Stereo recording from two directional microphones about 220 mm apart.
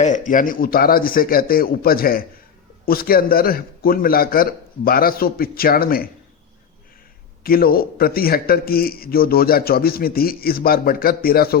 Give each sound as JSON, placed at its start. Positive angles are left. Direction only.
{"t": 0.0, "sound": "a man's voice", "side_deg": 35}
{"t": 7.4, "sound": "a man's voice", "side_deg": 40}